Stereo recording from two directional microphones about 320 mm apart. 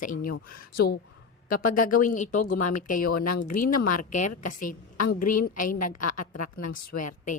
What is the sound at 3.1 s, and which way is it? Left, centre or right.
A woman's voice, left.